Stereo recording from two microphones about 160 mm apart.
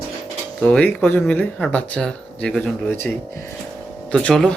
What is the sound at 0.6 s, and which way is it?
Speech, 10° left (ahead or behind).